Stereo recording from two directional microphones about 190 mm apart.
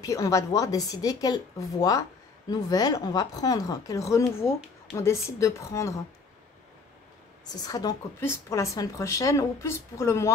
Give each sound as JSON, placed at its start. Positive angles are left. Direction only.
{"t": 0.0, "sound": "a woman's voice", "side_deg": 15}
{"t": 7.6, "sound": "a woman's voice", "side_deg": 20}